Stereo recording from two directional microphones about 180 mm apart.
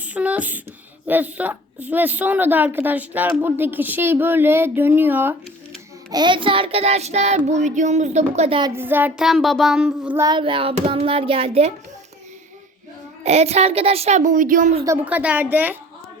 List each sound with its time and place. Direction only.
0.0 s a woman's voice: 10° right (ahead or behind)
6.1 s child singing: 25° right (ahead or behind)
8.7 s child singing: 10° right (ahead or behind)
10.2 s child singing: 25° right (ahead or behind)
13.2 s child singing: 35° right (ahead or behind)
14.8 s a woman's voice: 10° right (ahead or behind)